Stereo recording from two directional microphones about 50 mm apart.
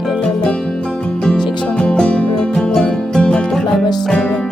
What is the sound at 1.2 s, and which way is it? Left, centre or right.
Music, centre.